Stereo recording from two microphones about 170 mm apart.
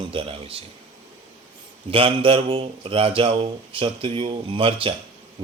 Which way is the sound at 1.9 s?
30° right (ahead or behind).